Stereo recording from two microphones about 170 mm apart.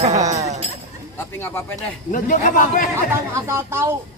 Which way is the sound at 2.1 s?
50° left (ahead or behind).